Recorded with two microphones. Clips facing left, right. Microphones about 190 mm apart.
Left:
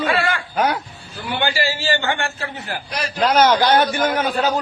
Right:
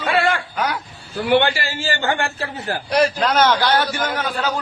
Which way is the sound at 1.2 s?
70° right (ahead or behind).